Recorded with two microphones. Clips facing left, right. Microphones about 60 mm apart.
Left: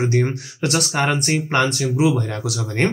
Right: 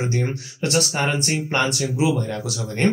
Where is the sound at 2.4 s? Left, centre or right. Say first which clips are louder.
Left 3 dB; left.